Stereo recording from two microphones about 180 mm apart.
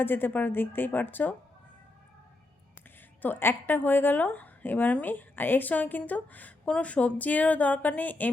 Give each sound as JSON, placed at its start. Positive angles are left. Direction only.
{"t": 0.0, "sound": "a woman's voice", "side_deg": 10}
{"t": 3.2, "sound": "a woman's voice", "side_deg": 10}